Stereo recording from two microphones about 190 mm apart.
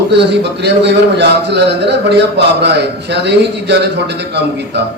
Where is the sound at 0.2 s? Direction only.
60° right (ahead or behind).